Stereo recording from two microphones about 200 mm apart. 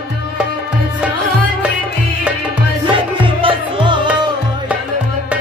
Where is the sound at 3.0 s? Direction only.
25° right (ahead or behind).